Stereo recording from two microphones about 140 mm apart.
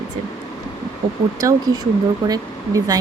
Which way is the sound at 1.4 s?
20° right (ahead or behind).